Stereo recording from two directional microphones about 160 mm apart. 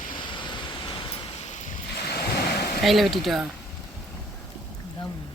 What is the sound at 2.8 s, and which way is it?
Speech, centre (ahead or behind).